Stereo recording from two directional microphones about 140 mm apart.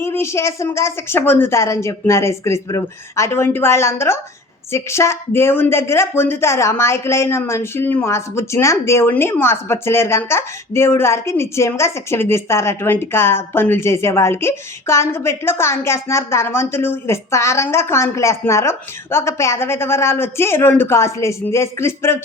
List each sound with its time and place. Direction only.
0.0 s speech: 20° left (ahead or behind)